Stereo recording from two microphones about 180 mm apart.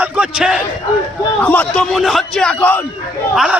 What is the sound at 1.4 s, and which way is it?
Speech, 5° left (ahead or behind).